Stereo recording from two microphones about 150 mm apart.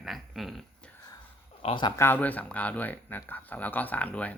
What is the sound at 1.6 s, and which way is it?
Speech, 35° left (ahead or behind).